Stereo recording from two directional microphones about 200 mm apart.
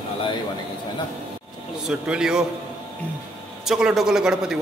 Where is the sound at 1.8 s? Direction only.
5° right (ahead or behind).